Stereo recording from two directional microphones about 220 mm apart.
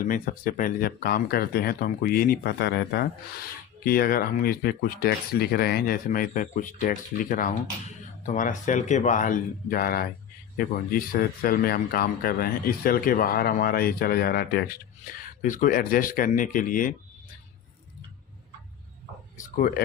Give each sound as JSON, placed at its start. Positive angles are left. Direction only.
{"t": 0.0, "sound": "speech", "side_deg": 40}
{"t": 15.4, "sound": "speech", "side_deg": 35}
{"t": 19.4, "sound": "speech", "side_deg": 40}